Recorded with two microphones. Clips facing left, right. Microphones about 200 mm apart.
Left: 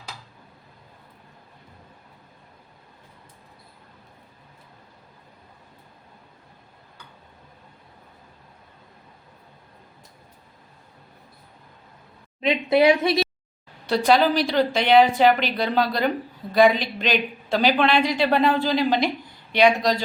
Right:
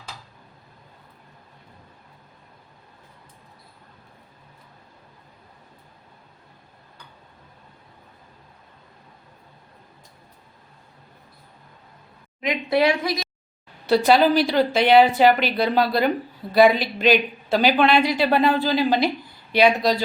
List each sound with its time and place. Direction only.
12.4 s a woman's voice: 25° left (ahead or behind)
13.8 s a woman's voice: 5° right (ahead or behind)